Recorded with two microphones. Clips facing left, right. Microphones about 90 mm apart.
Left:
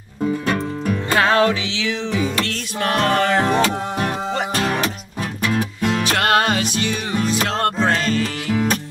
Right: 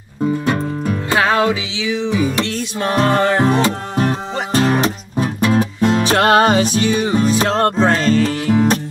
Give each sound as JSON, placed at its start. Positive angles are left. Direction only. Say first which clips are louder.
{"t": 0.5, "sound": "music", "louder": "right 2 dB", "side_deg": -20}
{"t": 4.6, "sound": "music", "louder": "right 5 dB", "side_deg": -30}